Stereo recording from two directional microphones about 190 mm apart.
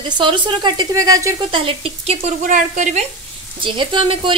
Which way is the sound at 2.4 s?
40° right (ahead or behind).